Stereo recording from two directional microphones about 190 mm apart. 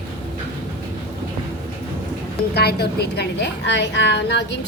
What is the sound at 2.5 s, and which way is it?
A woman's voice, 60° left (ahead or behind).